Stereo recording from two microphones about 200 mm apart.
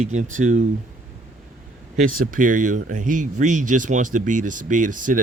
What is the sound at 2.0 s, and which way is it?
Speech, 45° right (ahead or behind).